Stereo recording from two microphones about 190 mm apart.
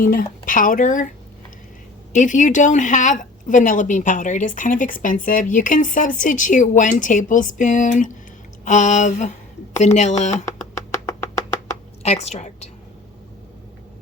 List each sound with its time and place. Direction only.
0.1 s a woman's voice: 45° left (ahead or behind)
2.1 s a woman's voice: 40° left (ahead or behind)
12.0 s speech: 35° left (ahead or behind)